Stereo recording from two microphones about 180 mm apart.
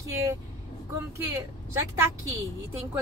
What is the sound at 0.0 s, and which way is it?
Vehicle, 15° right (ahead or behind).